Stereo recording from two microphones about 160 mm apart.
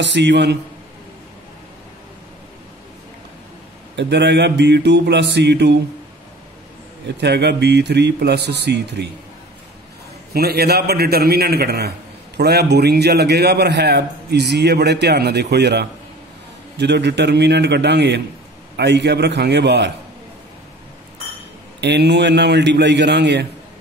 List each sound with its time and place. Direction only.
0.0 s a man's voice: 90° right
3.9 s a man's voice: 90° right
7.1 s a man's voice: 90° right
10.3 s a man's voice: 80° right
21.8 s a man's voice: 90° right